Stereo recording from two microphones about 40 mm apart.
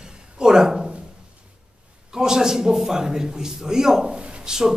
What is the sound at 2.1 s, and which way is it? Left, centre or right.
A man's voice, centre.